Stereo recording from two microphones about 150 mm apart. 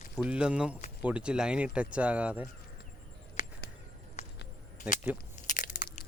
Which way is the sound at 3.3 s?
60° left (ahead or behind).